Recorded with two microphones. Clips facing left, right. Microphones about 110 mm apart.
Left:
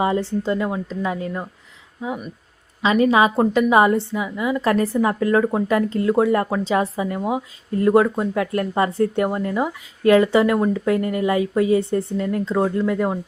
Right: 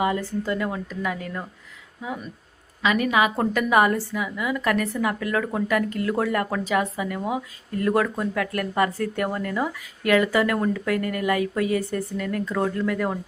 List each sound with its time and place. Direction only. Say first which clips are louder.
0.0 s speech: left 4 dB; 30° left (ahead or behind)